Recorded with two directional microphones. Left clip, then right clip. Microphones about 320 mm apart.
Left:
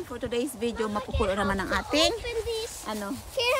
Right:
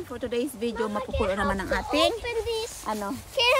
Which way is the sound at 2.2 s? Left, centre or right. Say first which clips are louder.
Right 2 dB; right.